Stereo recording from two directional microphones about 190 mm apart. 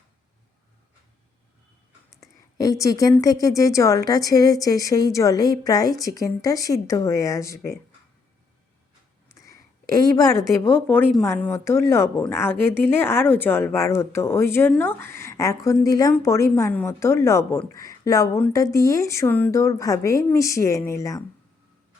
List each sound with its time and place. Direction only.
2.2 s a sound: 20° left (ahead or behind)
2.8 s a woman's voice: 20° left (ahead or behind)
9.9 s a woman's voice: 20° left (ahead or behind)
10.8 s a woman's voice: 10° left (ahead or behind)